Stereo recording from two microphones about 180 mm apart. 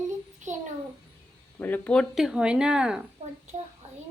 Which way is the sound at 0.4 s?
45° right (ahead or behind).